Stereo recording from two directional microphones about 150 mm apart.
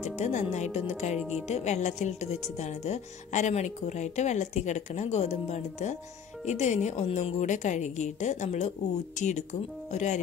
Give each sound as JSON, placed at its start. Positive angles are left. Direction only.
{"t": 0.0, "sound": "speech", "side_deg": 50}
{"t": 1.1, "sound": "a woman's voice", "side_deg": -5}
{"t": 1.5, "sound": "speech", "side_deg": 50}